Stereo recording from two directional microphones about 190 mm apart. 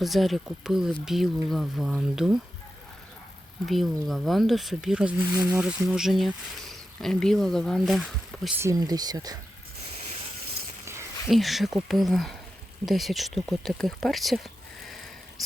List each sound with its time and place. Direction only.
0.0 s speech: centre (ahead or behind)
3.7 s speech: centre (ahead or behind)
8.6 s speech: 20° right (ahead or behind)
11.3 s speech: centre (ahead or behind)
14.8 s a sound: centre (ahead or behind)